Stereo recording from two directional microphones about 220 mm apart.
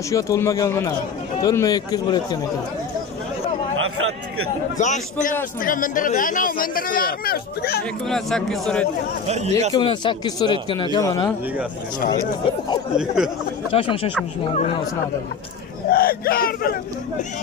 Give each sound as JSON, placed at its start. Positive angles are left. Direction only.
{"t": 0.1, "sound": "a man's voice", "side_deg": 15}
{"t": 3.7, "sound": "a sound", "side_deg": -65}
{"t": 4.7, "sound": "speech", "side_deg": 35}
{"t": 8.1, "sound": "speech", "side_deg": 0}
{"t": 9.3, "sound": "speech", "side_deg": -30}
{"t": 9.8, "sound": "speech", "side_deg": 20}
{"t": 12.9, "sound": "speech", "side_deg": -5}
{"t": 13.7, "sound": "speech", "side_deg": 25}
{"t": 15.9, "sound": "speech", "side_deg": 40}